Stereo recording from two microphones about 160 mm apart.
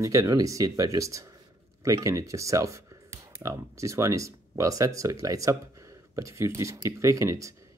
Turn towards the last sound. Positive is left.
turn(degrees=-20)  # may be behind; listen again after turning